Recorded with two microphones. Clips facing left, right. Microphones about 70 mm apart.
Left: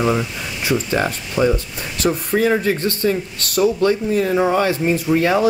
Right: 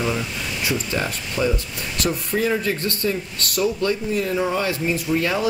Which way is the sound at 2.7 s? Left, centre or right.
Left.